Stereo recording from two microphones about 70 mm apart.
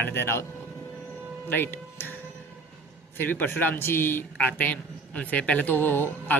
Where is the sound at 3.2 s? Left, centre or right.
Left.